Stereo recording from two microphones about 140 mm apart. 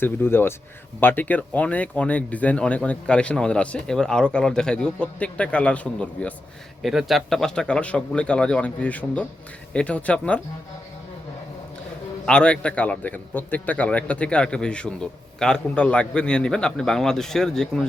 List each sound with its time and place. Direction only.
0.0 s a man's voice: 15° left (ahead or behind)
6.8 s a man's voice: centre (ahead or behind)
12.2 s a man's voice: 5° left (ahead or behind)